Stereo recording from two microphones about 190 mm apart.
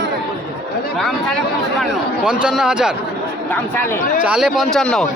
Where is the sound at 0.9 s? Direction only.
Centre (ahead or behind).